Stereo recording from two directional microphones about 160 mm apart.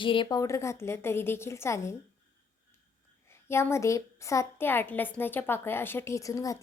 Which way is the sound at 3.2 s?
15° left (ahead or behind).